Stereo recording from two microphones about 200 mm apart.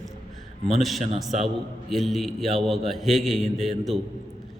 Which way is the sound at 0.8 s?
Centre (ahead or behind).